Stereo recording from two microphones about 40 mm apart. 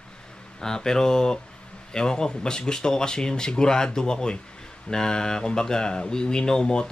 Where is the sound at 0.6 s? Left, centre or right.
Centre.